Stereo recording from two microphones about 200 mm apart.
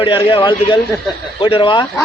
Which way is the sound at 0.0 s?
25° left (ahead or behind).